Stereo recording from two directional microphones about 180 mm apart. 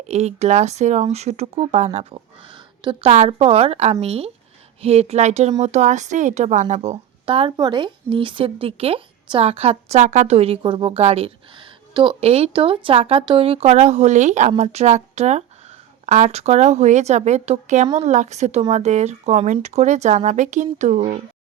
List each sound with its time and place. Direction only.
0.1 s a woman's voice: 35° right (ahead or behind)